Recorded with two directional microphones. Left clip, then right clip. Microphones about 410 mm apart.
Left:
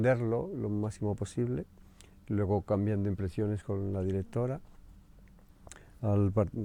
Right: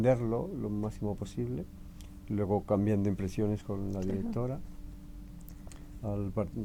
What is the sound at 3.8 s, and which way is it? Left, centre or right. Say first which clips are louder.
Speech: left 2 dB; left.